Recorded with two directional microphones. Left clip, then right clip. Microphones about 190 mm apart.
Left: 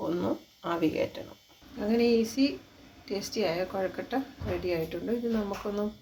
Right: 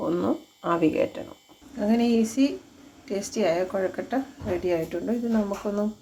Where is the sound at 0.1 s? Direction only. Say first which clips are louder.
Right 5 dB; 20° right (ahead or behind).